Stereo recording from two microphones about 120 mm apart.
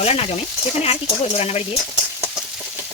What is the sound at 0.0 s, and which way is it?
Speech, 55° left (ahead or behind).